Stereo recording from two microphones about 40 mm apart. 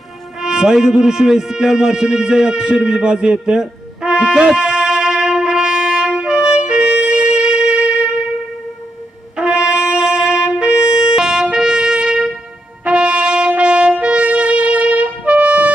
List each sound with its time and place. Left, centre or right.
0.3 s a man's voice: centre
3.4 s music: centre
9.3 s wind instrument: right
11.5 s trumpet: centre
12.8 s brass instrument: right
13.6 s trumpet: right
14.0 s music: right